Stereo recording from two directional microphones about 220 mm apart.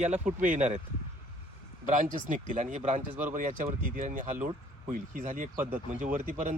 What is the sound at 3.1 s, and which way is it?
Speech, 10° right (ahead or behind).